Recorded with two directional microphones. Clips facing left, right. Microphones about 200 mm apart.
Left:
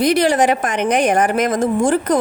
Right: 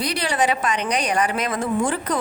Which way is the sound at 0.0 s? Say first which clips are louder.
Left 8 dB; 45° left (ahead or behind).